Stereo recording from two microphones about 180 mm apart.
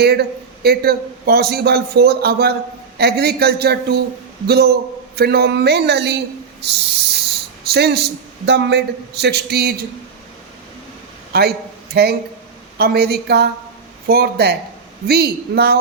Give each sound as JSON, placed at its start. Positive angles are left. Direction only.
{"t": 0.0, "sound": "a man's voice", "side_deg": -60}
{"t": 6.6, "sound": "a sound", "side_deg": -70}
{"t": 7.7, "sound": "a man's voice", "side_deg": -65}
{"t": 11.3, "sound": "a man's voice", "side_deg": -60}